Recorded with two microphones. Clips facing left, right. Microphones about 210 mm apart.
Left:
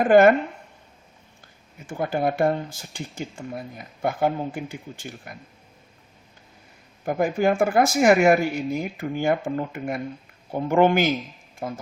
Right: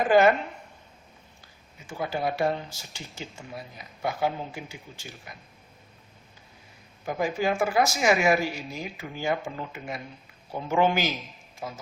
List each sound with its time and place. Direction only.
0.0 s speech: 55° left (ahead or behind)
1.9 s speech: 50° left (ahead or behind)
7.0 s speech: 55° left (ahead or behind)